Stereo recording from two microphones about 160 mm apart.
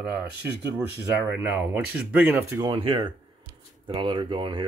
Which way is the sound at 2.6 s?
25° right (ahead or behind).